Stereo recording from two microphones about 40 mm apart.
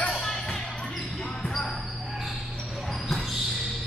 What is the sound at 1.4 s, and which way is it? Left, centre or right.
Basketball bounce, centre.